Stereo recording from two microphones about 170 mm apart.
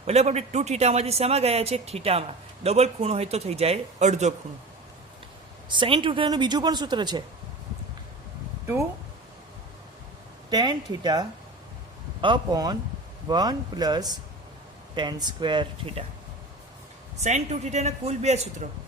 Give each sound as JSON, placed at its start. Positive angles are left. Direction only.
{"t": 0.0, "sound": "speech", "side_deg": -40}
{"t": 5.6, "sound": "speech", "side_deg": -30}
{"t": 10.5, "sound": "speech", "side_deg": -25}
{"t": 17.2, "sound": "speech", "side_deg": -40}